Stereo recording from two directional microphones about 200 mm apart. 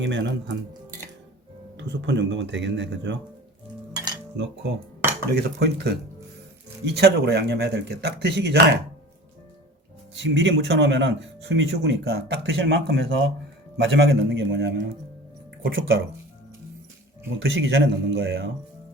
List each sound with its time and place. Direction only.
0.0 s speech: 65° right (ahead or behind)
1.7 s speech: 65° right (ahead or behind)
3.9 s cutlery: 20° right (ahead or behind)
5.3 s speech: 55° right (ahead or behind)
10.2 s speech: 70° right (ahead or behind)
15.6 s speech: 75° right (ahead or behind)
17.4 s speech: 70° right (ahead or behind)